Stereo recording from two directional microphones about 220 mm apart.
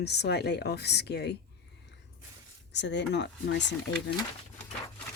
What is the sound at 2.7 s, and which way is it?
Speech, 50° left (ahead or behind).